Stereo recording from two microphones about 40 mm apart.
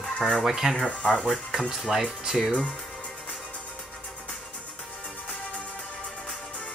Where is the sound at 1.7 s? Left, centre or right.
Centre.